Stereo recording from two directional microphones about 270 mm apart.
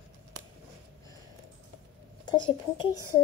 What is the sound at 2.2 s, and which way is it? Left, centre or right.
Speech, centre.